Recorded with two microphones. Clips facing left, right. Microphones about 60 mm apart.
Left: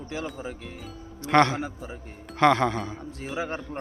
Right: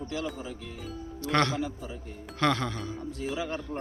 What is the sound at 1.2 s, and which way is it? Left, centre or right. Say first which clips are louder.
Speech: left 6 dB; left.